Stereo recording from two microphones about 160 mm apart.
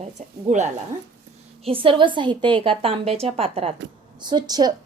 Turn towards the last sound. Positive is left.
turn(degrees=-25)  # may be behind; listen again after turning